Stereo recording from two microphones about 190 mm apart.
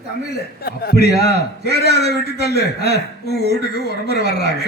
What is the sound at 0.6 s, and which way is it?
A man's voice, 55° left (ahead or behind).